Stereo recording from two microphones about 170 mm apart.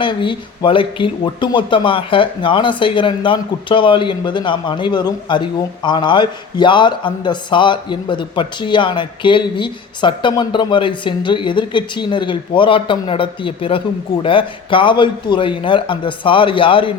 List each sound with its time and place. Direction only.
0.0 s speech: 30° left (ahead or behind)